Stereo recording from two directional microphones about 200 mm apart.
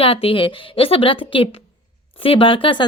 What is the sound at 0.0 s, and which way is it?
Speech, 30° left (ahead or behind).